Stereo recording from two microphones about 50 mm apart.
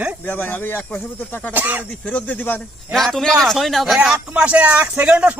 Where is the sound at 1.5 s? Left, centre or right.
Right.